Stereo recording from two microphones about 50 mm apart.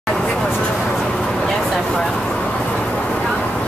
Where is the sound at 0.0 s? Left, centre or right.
Centre.